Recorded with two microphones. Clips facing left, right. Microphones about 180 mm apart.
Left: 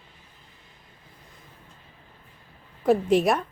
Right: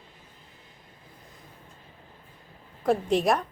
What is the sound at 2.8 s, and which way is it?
Speech, centre (ahead or behind).